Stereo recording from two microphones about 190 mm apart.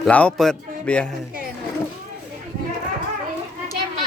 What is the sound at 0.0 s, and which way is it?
Speech, 5° left (ahead or behind).